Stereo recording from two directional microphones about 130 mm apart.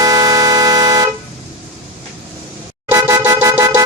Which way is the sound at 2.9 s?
20° right (ahead or behind).